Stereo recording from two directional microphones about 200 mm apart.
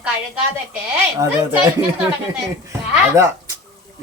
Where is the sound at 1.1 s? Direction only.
15° right (ahead or behind).